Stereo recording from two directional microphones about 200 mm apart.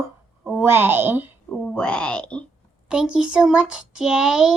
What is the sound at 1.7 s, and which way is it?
Speech, 5° left (ahead or behind).